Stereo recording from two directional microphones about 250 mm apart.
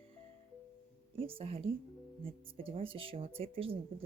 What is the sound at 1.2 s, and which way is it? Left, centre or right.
Speech, right.